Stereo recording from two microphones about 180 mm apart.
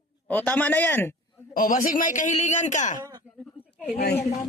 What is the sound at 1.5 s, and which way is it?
Speech, 50° left (ahead or behind).